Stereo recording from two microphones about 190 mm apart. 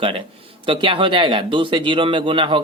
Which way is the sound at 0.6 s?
25° right (ahead or behind).